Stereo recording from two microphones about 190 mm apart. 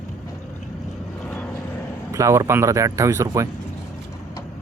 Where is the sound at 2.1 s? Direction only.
15° right (ahead or behind).